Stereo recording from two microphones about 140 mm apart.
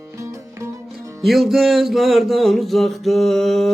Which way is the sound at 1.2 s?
Centre (ahead or behind).